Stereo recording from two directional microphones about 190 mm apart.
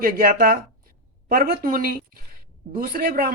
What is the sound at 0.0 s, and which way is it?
A woman's voice, 50° right (ahead or behind).